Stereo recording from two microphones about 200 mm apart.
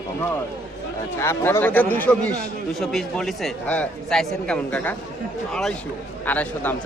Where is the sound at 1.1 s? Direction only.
15° left (ahead or behind).